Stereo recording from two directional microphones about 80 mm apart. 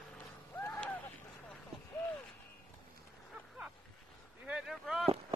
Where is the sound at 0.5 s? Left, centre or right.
Left.